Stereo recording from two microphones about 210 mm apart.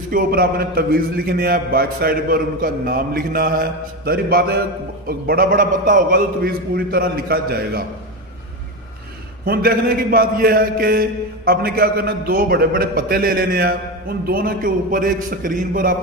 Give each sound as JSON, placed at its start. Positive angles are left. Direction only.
{"t": 0.1, "sound": "a man's voice", "side_deg": -45}
{"t": 9.5, "sound": "a man's voice", "side_deg": -45}